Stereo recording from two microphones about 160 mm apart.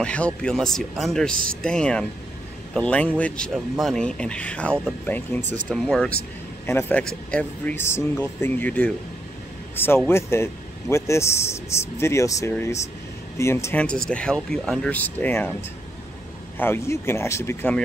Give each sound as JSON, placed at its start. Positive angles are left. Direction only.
{"t": 0.0, "sound": "speech", "side_deg": 5}
{"t": 1.3, "sound": "speech", "side_deg": -60}
{"t": 1.6, "sound": "a man's voice", "side_deg": 5}
{"t": 10.0, "sound": "a man's voice", "side_deg": 15}
{"t": 16.5, "sound": "a man's voice", "side_deg": 15}